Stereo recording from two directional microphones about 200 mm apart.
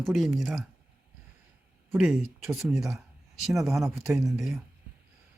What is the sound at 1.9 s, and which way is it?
Speech, 5° right (ahead or behind).